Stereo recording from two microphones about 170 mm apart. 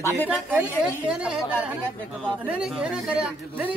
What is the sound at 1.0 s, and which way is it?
A man's voice, 5° right (ahead or behind).